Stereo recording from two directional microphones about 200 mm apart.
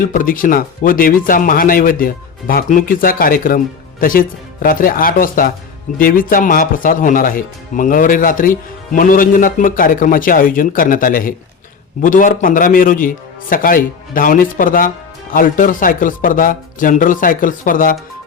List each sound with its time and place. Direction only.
0.0 s a man's voice: 45° left (ahead or behind)